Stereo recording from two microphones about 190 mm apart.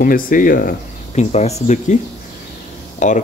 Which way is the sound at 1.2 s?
35° left (ahead or behind).